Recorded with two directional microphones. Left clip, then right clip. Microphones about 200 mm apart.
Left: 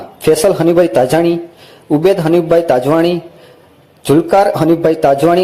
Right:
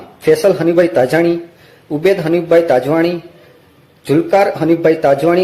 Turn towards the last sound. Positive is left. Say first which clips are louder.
# left 2 dB
turn(degrees=25)  # may be behind; listen again after turning